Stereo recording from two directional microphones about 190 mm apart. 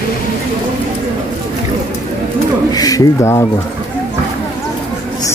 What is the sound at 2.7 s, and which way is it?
Speech, 20° left (ahead or behind).